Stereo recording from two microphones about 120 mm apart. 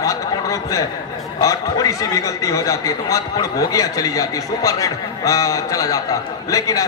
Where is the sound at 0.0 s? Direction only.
25° left (ahead or behind).